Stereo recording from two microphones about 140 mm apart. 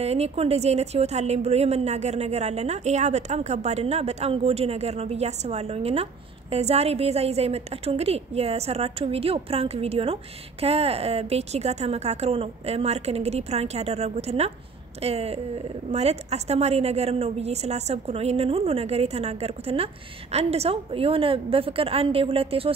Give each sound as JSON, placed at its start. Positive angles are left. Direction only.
{"t": 0.0, "sound": "a woman's voice", "side_deg": -50}